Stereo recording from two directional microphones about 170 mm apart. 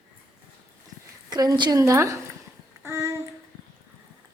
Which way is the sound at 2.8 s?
15° right (ahead or behind).